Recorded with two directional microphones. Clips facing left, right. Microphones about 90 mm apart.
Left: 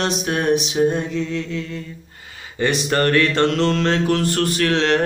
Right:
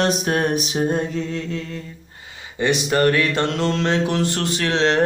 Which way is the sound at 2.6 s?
15° right (ahead or behind).